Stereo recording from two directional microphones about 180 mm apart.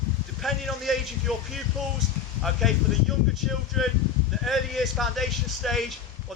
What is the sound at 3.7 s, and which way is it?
Speech, centre (ahead or behind).